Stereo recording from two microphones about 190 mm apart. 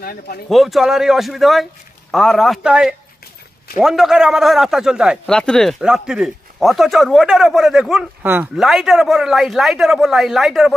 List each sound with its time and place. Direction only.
0.0 s speech: 50° left (ahead or behind)
0.5 s a man's voice: centre (ahead or behind)